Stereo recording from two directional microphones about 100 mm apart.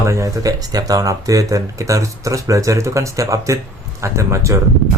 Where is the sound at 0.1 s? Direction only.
35° right (ahead or behind).